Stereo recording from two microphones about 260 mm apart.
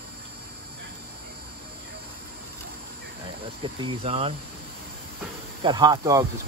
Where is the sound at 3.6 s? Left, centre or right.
Right.